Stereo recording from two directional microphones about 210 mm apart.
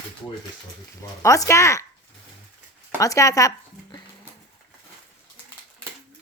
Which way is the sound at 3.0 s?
15° left (ahead or behind).